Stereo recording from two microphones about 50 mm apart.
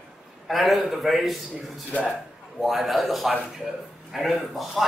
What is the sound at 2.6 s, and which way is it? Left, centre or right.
A man's voice, centre.